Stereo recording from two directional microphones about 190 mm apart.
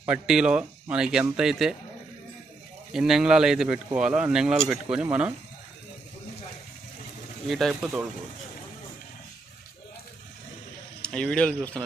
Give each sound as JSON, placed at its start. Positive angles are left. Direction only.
{"t": 0.0, "sound": "a man's voice", "side_deg": -5}
{"t": 2.9, "sound": "a man's voice", "side_deg": -5}
{"t": 7.4, "sound": "a man's voice", "side_deg": 0}
{"t": 11.0, "sound": "a man's voice", "side_deg": 5}